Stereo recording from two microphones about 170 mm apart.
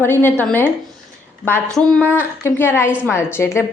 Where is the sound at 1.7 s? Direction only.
5° left (ahead or behind).